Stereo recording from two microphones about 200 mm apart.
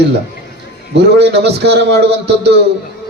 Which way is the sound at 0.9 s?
60° right (ahead or behind).